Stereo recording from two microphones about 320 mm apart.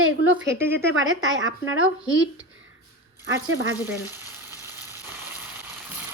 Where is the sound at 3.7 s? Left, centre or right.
Centre.